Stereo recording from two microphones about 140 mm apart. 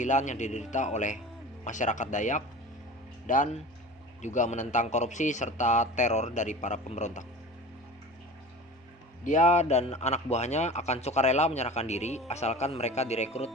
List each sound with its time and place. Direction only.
0.0 s speech: 60° left (ahead or behind)
9.2 s a man's voice: 60° left (ahead or behind)